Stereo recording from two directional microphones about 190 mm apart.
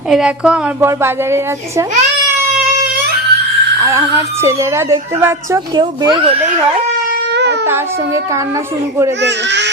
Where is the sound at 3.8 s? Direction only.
15° right (ahead or behind).